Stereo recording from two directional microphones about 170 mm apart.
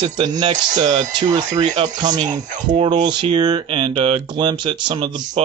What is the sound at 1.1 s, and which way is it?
Speech, 25° right (ahead or behind).